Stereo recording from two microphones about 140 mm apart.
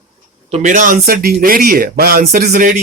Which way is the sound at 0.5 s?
60° right (ahead or behind).